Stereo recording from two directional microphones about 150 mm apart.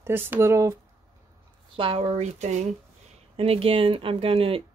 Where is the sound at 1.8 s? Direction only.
40° right (ahead or behind).